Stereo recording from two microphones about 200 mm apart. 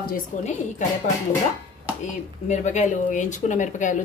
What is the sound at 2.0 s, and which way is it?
Speech, 35° left (ahead or behind).